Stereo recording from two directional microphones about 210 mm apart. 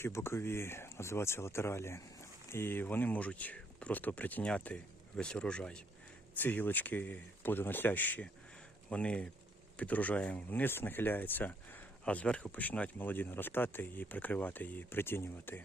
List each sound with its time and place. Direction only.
0.0 s speech: 10° left (ahead or behind)